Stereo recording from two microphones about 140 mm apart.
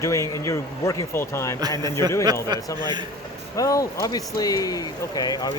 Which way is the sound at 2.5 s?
30° right (ahead or behind).